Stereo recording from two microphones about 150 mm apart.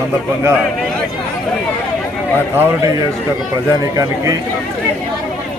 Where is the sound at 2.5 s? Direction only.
20° right (ahead or behind).